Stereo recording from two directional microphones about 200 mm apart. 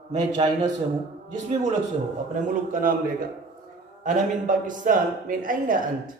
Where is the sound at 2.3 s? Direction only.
40° right (ahead or behind).